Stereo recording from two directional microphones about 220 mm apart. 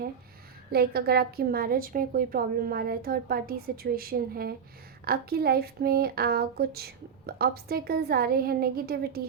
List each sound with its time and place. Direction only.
0.7 s a woman's voice: 45° right (ahead or behind)